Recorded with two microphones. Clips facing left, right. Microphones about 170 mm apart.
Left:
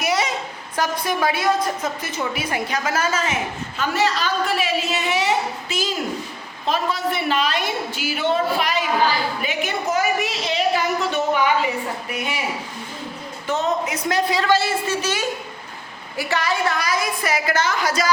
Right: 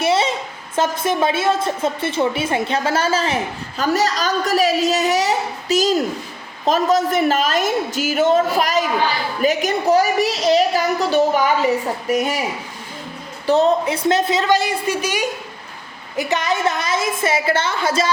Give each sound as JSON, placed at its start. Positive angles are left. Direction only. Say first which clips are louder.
{"t": 0.0, "sound": "a sound", "louder": "right 4 dB", "side_deg": -25}
{"t": 0.8, "sound": "a woman's voice", "louder": "right 4 dB", "side_deg": -25}
{"t": 13.5, "sound": "a woman's voice", "louder": "right 7 dB", "side_deg": -30}